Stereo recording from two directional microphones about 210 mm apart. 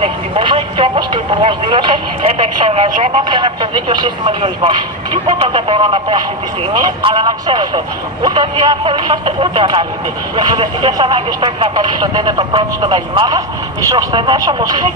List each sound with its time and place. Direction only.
0.0 s speech: 25° right (ahead or behind)